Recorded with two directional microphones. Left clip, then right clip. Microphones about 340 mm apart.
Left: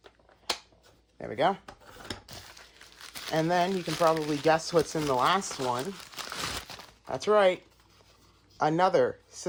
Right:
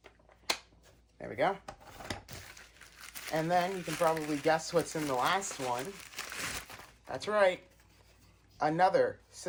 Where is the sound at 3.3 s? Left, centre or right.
Left.